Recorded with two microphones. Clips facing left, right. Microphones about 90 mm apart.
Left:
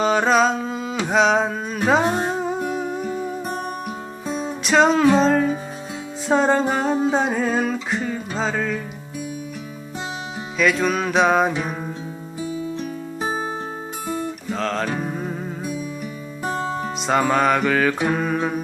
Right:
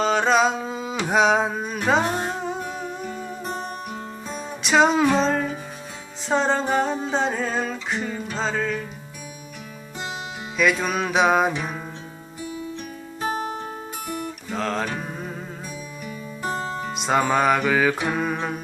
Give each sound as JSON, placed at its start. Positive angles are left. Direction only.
{"t": 0.0, "sound": "carnatic music", "side_deg": 5}
{"t": 0.7, "sound": "humming", "side_deg": -15}
{"t": 1.0, "sound": "a sound", "side_deg": -10}
{"t": 2.0, "sound": "music", "side_deg": 30}
{"t": 2.4, "sound": "music", "side_deg": 5}
{"t": 4.6, "sound": "music", "side_deg": -5}
{"t": 10.6, "sound": "music", "side_deg": -5}
{"t": 14.5, "sound": "music", "side_deg": -5}
{"t": 17.0, "sound": "music", "side_deg": 0}